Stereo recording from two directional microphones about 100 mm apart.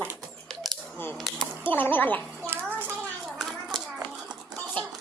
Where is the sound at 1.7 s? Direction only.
20° left (ahead or behind).